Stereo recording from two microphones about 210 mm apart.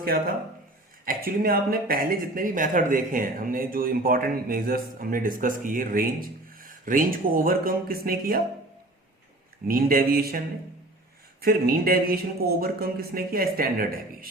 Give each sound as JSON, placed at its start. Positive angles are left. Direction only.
{"t": 0.0, "sound": "speech", "side_deg": -45}
{"t": 9.6, "sound": "speech", "side_deg": -45}